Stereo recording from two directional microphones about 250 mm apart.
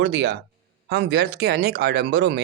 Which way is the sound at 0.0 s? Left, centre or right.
Right.